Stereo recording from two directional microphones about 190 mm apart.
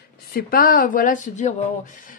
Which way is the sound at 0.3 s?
50° left (ahead or behind).